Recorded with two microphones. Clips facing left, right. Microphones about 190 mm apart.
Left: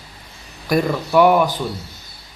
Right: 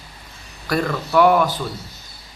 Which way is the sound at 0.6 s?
15° left (ahead or behind).